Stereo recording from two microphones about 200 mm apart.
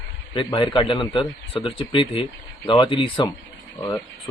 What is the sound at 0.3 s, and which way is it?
Speech, 25° left (ahead or behind).